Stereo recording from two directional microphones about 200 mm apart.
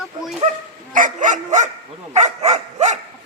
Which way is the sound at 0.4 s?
40° right (ahead or behind).